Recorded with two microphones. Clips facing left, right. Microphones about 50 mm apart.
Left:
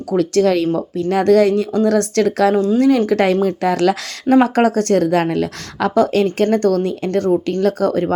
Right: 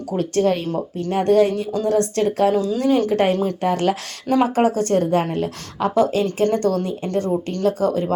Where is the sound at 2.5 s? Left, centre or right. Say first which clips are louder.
Left 5 dB; left.